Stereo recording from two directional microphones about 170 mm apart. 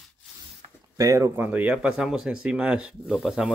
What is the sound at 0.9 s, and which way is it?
Speech, 20° right (ahead or behind).